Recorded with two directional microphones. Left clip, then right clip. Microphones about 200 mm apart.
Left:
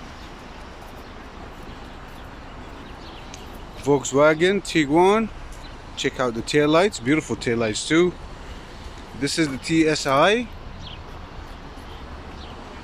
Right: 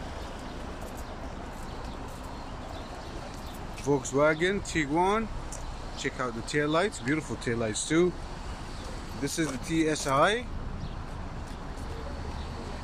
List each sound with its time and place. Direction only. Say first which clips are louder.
3.8 s speech: left 8 dB; 5° left (ahead or behind)
9.2 s speech: left 8 dB; 5° left (ahead or behind)